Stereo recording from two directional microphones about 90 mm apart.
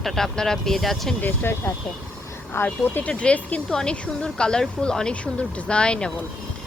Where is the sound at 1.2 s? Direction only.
25° left (ahead or behind).